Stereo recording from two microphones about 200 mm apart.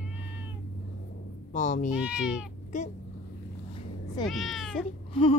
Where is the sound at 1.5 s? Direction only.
40° left (ahead or behind).